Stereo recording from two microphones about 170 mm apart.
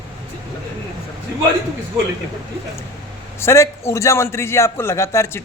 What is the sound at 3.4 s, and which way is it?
A man's voice, 15° left (ahead or behind).